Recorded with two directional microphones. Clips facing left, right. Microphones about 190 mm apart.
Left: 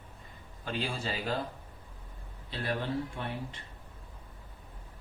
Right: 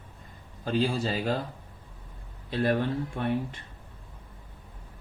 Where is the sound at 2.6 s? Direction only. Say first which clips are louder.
Right 7 dB; 55° right (ahead or behind).